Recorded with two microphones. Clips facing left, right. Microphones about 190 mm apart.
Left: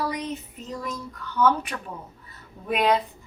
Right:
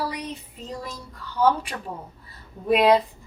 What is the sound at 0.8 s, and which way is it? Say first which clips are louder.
A woman's voice: left 3 dB; 30° right (ahead or behind).